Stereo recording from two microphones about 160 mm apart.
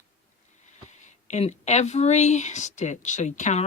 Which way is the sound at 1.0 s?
45° left (ahead or behind).